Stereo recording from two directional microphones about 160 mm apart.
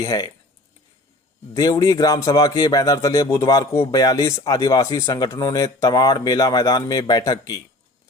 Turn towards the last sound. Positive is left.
turn(degrees=25)  # may be behind; listen again after turning